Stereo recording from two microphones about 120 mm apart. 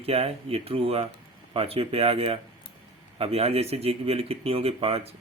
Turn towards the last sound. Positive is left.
turn(degrees=-55)  # may be behind; listen again after turning